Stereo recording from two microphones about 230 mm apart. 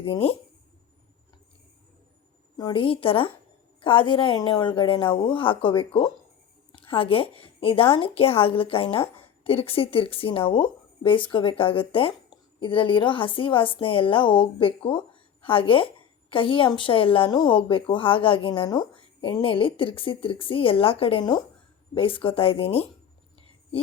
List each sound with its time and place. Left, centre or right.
0.0 s a woman's voice: left
2.6 s a woman's voice: left